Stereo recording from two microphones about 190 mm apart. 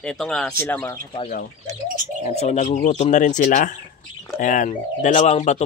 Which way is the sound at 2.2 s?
35° left (ahead or behind).